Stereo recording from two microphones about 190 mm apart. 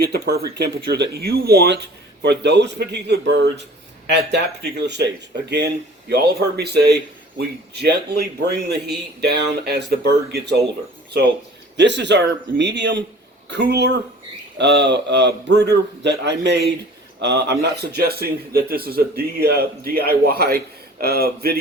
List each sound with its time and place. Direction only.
0.0 s a man's voice: 60° right (ahead or behind)
11.8 s a man's voice: 65° right (ahead or behind)